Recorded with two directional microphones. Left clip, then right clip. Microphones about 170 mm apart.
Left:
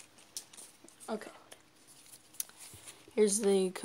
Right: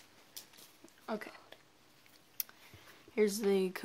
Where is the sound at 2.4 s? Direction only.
15° right (ahead or behind).